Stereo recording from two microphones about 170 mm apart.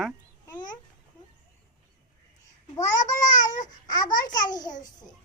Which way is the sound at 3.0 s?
45° left (ahead or behind).